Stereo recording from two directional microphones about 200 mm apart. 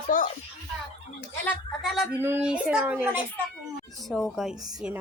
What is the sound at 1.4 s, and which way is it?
Speech, centre (ahead or behind).